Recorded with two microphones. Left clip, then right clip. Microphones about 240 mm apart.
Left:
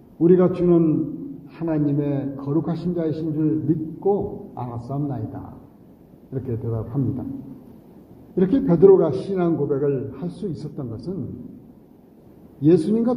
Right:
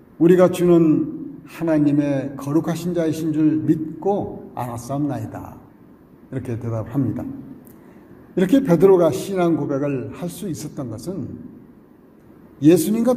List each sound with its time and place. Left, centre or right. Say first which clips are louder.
0.2 s a man's voice: right 3 dB; right
8.4 s a man's voice: right 1 dB; right
12.6 s a man's voice: right 2 dB; right